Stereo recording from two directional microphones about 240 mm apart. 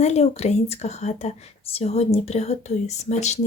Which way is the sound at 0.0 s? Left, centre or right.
Left.